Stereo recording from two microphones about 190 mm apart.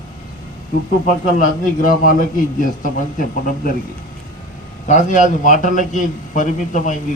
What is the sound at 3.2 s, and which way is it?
Speech, 45° left (ahead or behind).